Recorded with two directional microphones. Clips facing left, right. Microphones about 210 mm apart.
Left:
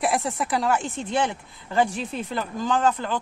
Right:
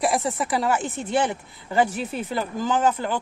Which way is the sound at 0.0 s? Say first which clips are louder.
Right 1 dB; centre (ahead or behind).